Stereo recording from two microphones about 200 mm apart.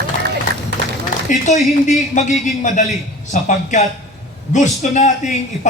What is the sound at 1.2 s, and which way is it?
A man's voice, 35° left (ahead or behind).